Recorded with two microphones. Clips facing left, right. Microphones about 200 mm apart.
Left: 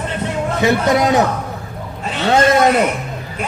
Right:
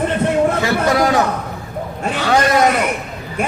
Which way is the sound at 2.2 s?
25° left (ahead or behind).